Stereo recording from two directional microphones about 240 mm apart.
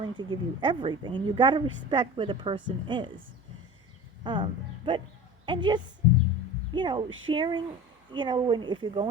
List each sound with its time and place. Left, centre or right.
0.0 s a woman's voice: centre
4.2 s speech: centre
5.5 s a woman's voice: centre